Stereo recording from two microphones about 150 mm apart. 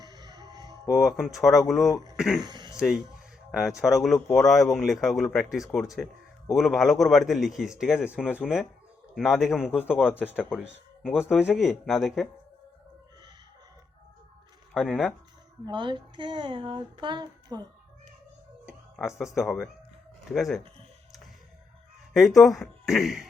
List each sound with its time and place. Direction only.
0.0 s music: 30° right (ahead or behind)
0.9 s speech: centre (ahead or behind)
2.4 s speech: 30° right (ahead or behind)
2.7 s speech: centre (ahead or behind)
9.7 s speech: 10° left (ahead or behind)
10.0 s speech: 5° right (ahead or behind)
14.7 s speech: centre (ahead or behind)
15.6 s speech: 35° right (ahead or behind)
18.6 s speech: 5° right (ahead or behind)
22.4 s speech: centre (ahead or behind)